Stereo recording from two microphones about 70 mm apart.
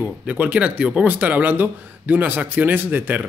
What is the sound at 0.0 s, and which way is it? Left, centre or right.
Speech, centre.